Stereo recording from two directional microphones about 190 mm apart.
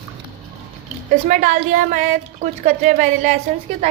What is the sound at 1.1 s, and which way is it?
A woman's voice, 40° right (ahead or behind).